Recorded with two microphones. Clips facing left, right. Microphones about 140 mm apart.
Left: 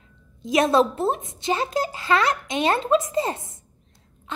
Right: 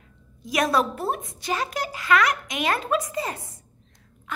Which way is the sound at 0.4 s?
25° left (ahead or behind).